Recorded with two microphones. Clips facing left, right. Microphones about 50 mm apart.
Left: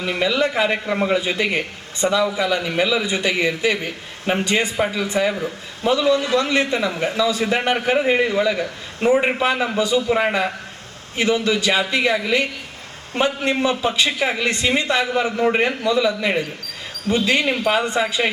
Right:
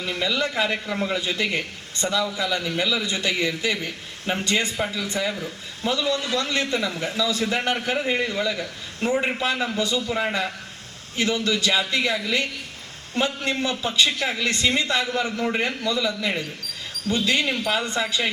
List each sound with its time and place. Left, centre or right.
0.0 s a man's voice: centre